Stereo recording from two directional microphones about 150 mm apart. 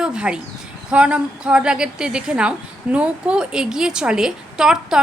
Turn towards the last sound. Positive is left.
turn(degrees=-5)  # may be behind; listen again after turning